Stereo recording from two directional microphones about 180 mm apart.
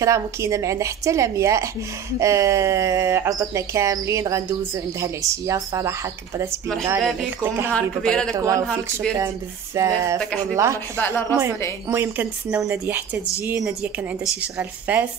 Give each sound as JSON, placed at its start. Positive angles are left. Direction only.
{"t": 0.0, "sound": "speech", "side_deg": -15}
{"t": 7.0, "sound": "speech", "side_deg": 0}
{"t": 7.7, "sound": "speech", "side_deg": 5}
{"t": 8.3, "sound": "speech", "side_deg": -15}
{"t": 9.8, "sound": "speech", "side_deg": -15}
{"t": 11.0, "sound": "speech", "side_deg": 10}
{"t": 11.9, "sound": "speech", "side_deg": -10}